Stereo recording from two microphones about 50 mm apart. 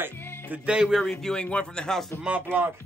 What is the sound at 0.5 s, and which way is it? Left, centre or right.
Speech, right.